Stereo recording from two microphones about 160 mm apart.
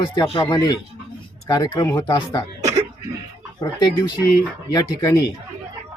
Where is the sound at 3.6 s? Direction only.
25° left (ahead or behind).